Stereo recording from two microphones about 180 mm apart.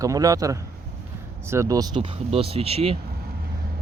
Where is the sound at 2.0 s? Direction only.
30° right (ahead or behind).